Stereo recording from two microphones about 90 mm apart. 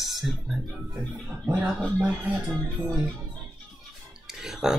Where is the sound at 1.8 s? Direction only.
15° right (ahead or behind).